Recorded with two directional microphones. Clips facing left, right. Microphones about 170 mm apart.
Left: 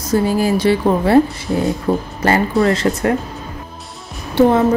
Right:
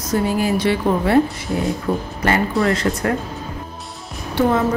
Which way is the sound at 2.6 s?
25° left (ahead or behind).